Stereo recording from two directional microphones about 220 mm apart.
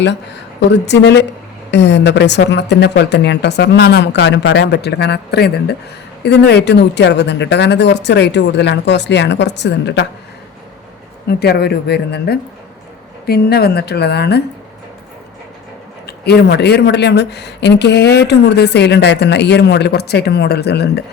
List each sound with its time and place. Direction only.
0.6 s speech: 50° left (ahead or behind)
11.3 s speech: 45° left (ahead or behind)
16.0 s speech: 45° left (ahead or behind)